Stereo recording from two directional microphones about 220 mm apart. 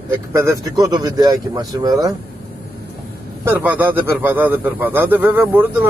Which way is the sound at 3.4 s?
10° right (ahead or behind).